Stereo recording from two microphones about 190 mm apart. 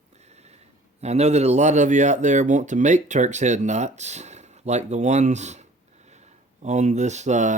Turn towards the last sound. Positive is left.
turn(degrees=-40)  # may be behind; listen again after turning